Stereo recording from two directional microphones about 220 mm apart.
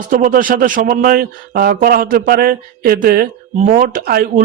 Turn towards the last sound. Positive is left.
turn(degrees=-40)  # may be behind; listen again after turning